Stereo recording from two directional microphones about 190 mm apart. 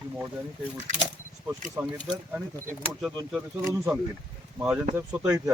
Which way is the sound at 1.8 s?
15° right (ahead or behind).